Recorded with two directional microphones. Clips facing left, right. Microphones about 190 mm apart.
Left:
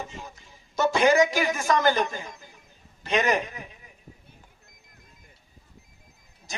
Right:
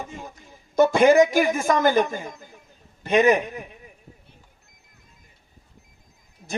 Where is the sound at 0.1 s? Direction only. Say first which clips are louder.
Right 4 dB; 55° right (ahead or behind).